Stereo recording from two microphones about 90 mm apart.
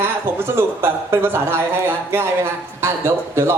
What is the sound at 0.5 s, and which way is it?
A man's voice, 30° right (ahead or behind).